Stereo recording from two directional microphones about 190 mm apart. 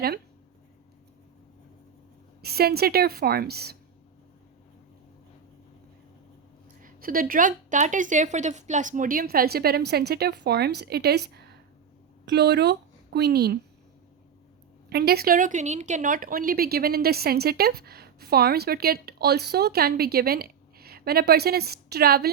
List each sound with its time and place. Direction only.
2.4 s a woman's voice: 55° right (ahead or behind)
6.8 s a woman's voice: 50° right (ahead or behind)
14.8 s a woman's voice: 55° right (ahead or behind)